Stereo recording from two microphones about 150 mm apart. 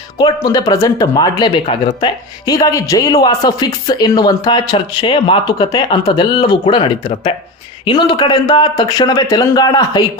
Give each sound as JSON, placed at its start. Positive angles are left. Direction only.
{"t": 0.2, "sound": "speech", "side_deg": 25}